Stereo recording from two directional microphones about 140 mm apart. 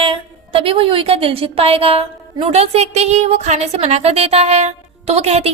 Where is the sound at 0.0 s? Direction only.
40° right (ahead or behind).